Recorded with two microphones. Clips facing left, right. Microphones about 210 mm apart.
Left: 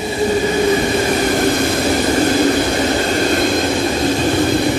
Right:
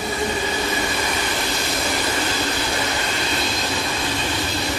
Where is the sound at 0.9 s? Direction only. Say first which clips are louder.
Left 10 dB; 45° left (ahead or behind).